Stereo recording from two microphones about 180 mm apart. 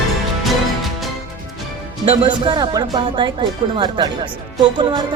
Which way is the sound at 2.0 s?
30° right (ahead or behind).